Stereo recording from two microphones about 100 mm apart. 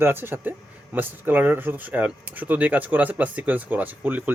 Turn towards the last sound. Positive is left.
turn(degrees=-20)  # may be behind; listen again after turning